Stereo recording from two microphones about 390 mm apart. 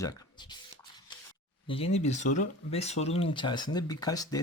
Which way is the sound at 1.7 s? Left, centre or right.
Centre.